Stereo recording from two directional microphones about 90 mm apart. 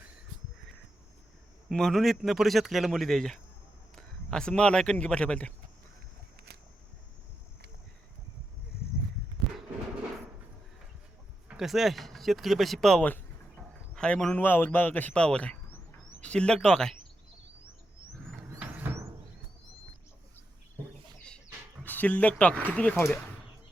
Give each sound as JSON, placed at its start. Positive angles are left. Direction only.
{"t": 1.7, "sound": "a man's voice", "side_deg": 5}
{"t": 11.4, "sound": "a man's voice", "side_deg": -5}
{"t": 14.3, "sound": "speech", "side_deg": 20}
{"t": 21.8, "sound": "speech", "side_deg": 20}